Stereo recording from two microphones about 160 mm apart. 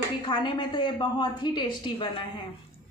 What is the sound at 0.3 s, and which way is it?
A woman's voice, 30° left (ahead or behind).